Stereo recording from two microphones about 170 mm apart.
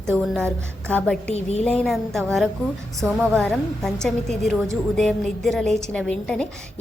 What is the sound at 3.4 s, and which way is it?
A woman's voice, 5° left (ahead or behind).